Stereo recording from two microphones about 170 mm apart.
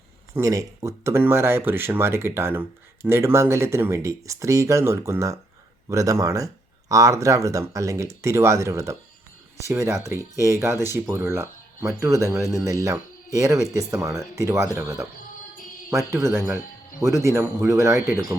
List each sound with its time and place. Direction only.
0.3 s speech: 20° right (ahead or behind)